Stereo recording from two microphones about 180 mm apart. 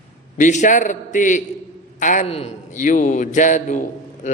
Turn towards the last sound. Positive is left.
turn(degrees=45)  # may be behind; listen again after turning